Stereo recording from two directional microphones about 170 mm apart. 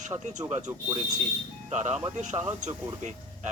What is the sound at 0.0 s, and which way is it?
Speech, 45° right (ahead or behind).